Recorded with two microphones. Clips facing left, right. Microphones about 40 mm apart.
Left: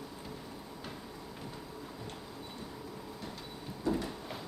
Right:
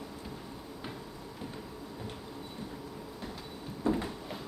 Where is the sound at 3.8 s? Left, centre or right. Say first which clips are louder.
Right 2 dB; right.